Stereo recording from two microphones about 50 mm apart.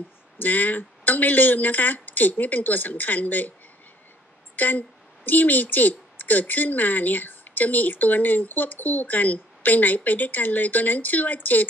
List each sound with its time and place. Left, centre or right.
0.4 s speech: left
4.6 s speech: left